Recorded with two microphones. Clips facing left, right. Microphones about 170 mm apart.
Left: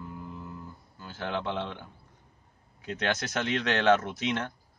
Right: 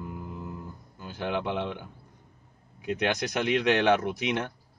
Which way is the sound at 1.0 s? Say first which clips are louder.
Right 3 dB; 15° right (ahead or behind).